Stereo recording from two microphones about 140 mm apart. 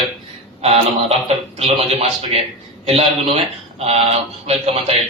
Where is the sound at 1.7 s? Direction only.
45° right (ahead or behind).